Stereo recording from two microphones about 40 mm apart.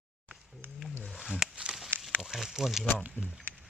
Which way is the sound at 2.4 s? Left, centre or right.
Centre.